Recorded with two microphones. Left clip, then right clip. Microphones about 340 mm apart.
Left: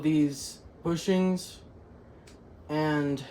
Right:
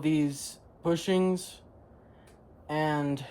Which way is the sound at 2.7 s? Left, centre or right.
Right.